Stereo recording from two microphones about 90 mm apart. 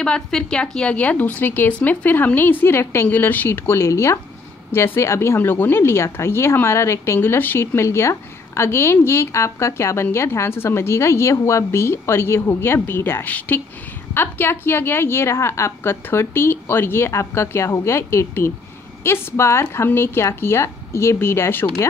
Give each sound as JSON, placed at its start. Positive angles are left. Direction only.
{"t": 0.0, "sound": "speech", "side_deg": 10}